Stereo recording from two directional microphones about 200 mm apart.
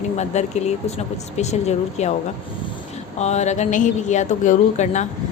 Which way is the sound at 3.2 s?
35° left (ahead or behind).